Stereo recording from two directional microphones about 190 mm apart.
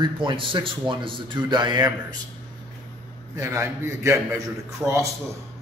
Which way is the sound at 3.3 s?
15° right (ahead or behind).